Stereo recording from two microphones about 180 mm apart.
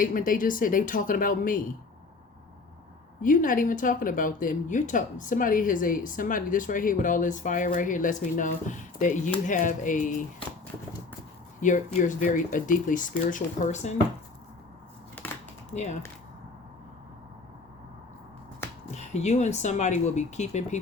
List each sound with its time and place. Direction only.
0.0 s speech: 50° left (ahead or behind)
3.2 s speech: 50° left (ahead or behind)
11.6 s speech: 45° left (ahead or behind)
15.2 s a sound: 10° left (ahead or behind)
15.7 s speech: 40° left (ahead or behind)
18.9 s speech: 40° left (ahead or behind)